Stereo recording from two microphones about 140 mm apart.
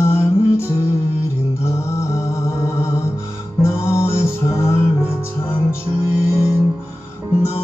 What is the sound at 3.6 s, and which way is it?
Music, 20° left (ahead or behind).